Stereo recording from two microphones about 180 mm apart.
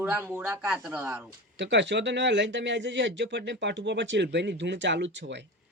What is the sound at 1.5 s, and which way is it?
Speech, 80° right.